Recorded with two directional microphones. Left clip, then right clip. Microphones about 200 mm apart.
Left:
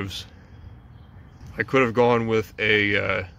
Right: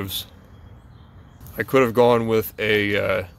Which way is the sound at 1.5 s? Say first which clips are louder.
Right 2 dB; 15° right (ahead or behind).